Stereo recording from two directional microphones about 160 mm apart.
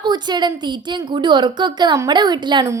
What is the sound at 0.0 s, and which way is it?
A woman's voice, 25° right (ahead or behind).